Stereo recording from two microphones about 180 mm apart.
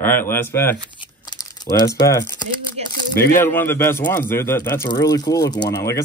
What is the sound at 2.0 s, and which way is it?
Speech, 20° left (ahead or behind).